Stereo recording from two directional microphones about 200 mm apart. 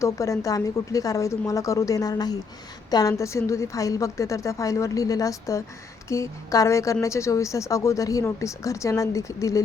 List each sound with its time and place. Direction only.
0.0 s a woman's voice: 15° left (ahead or behind)